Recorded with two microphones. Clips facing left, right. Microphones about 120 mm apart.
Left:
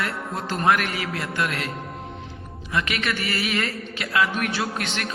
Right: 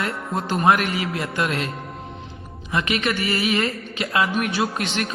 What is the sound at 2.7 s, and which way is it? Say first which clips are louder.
A man's voice: right 3 dB; 20° right (ahead or behind).